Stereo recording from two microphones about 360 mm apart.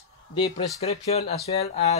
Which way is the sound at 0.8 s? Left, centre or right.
Centre.